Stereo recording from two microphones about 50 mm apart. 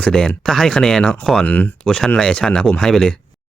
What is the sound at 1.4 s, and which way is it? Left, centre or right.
Speech, left.